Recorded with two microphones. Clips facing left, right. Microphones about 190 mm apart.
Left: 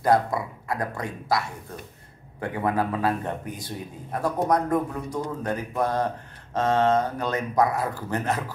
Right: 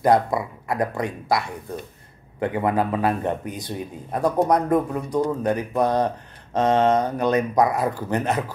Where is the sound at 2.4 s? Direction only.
20° right (ahead or behind).